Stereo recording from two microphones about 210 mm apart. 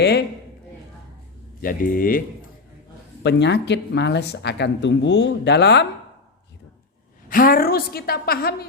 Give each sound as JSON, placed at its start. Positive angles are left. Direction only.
{"t": 0.0, "sound": "a woman's voice", "side_deg": 50}
{"t": 1.6, "sound": "a woman's voice", "side_deg": 40}
{"t": 3.2, "sound": "speech", "side_deg": 55}
{"t": 7.3, "sound": "a woman's voice", "side_deg": 45}